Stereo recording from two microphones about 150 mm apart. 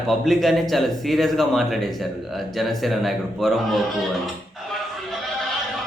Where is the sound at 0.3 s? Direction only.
Centre (ahead or behind).